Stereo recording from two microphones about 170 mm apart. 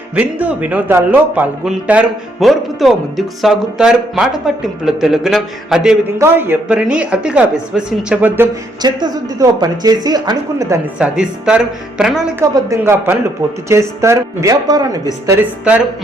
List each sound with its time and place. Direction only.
0.2 s a man's voice: 10° right (ahead or behind)
8.8 s speech: 25° right (ahead or behind)
10.9 s a man's voice: 5° right (ahead or behind)
12.5 s a woman's voice: 20° right (ahead or behind)
15.6 s a woman's voice: 5° right (ahead or behind)